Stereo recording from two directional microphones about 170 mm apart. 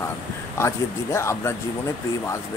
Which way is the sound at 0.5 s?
15° left (ahead or behind).